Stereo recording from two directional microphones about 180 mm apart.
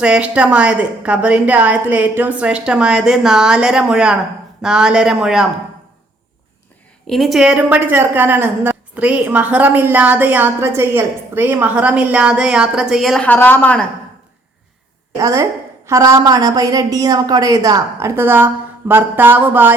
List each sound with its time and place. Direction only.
0.0 s a woman's voice: 5° right (ahead or behind)
7.1 s a woman's voice: centre (ahead or behind)
15.2 s a woman's voice: 15° right (ahead or behind)